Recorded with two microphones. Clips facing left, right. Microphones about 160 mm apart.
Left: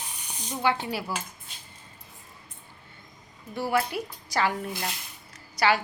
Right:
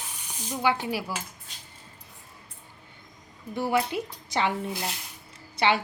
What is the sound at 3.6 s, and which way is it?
Speech, 20° right (ahead or behind).